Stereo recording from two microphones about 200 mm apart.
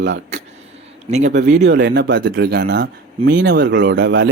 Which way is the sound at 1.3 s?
60° right (ahead or behind).